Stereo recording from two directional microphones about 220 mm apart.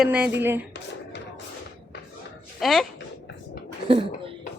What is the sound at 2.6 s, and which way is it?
Speech, centre (ahead or behind).